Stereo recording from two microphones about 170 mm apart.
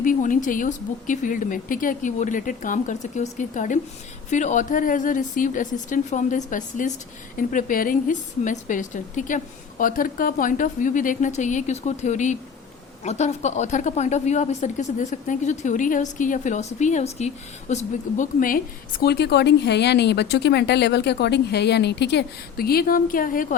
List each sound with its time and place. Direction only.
0.0 s a woman's voice: 50° left (ahead or behind)
18.2 s a woman's voice: 55° left (ahead or behind)